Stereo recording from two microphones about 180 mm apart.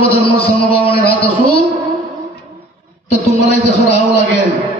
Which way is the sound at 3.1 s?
35° left (ahead or behind).